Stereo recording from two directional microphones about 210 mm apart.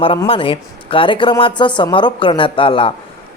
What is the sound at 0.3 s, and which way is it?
A woman's voice, 25° left (ahead or behind).